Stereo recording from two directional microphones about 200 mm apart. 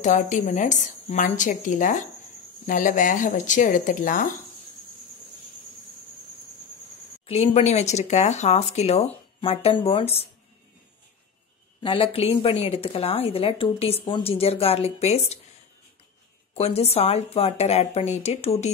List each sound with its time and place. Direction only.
0.0 s a woman's voice: 35° left (ahead or behind)
7.2 s a woman's voice: 30° left (ahead or behind)
11.8 s a woman's voice: 25° left (ahead or behind)
16.5 s a woman's voice: 30° left (ahead or behind)